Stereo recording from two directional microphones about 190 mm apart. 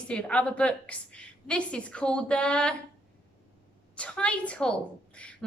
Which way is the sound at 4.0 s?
5° left (ahead or behind).